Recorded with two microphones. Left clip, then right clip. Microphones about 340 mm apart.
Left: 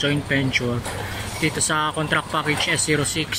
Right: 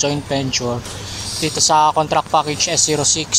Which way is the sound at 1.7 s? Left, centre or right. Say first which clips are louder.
Right 10 dB; centre.